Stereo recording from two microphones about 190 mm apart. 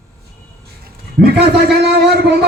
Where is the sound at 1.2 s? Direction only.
60° right (ahead or behind).